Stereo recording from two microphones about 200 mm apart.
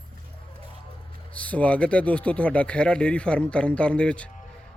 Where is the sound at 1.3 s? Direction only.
5° left (ahead or behind).